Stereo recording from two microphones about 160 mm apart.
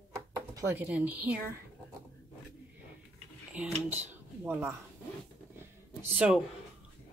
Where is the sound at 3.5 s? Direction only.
10° right (ahead or behind).